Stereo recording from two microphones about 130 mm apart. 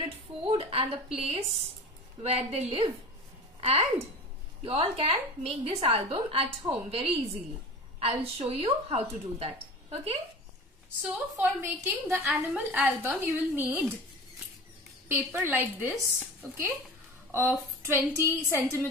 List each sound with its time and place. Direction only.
0.0 s a woman's voice: 40° right (ahead or behind)
4.6 s a woman's voice: 45° right (ahead or behind)
11.6 s a woman's voice: 15° right (ahead or behind)
15.0 s a woman's voice: 15° right (ahead or behind)